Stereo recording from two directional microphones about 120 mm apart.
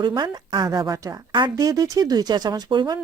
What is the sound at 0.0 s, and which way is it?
A woman's voice, 40° right (ahead or behind).